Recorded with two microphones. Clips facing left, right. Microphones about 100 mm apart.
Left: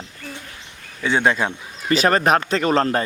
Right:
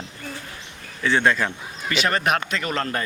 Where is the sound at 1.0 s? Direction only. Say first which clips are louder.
Left 1 dB; 15° left (ahead or behind).